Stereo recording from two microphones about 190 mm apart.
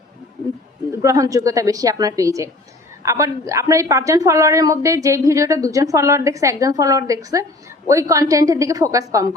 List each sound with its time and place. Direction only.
1.0 s a woman's voice: 20° right (ahead or behind)